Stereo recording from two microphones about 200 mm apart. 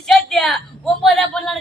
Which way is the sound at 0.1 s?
Centre (ahead or behind).